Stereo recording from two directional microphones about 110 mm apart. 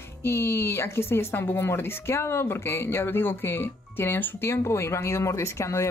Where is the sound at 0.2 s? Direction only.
20° left (ahead or behind).